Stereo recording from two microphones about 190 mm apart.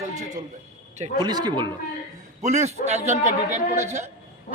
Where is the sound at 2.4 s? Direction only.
35° right (ahead or behind).